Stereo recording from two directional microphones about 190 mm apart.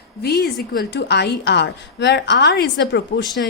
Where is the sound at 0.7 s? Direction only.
60° left (ahead or behind).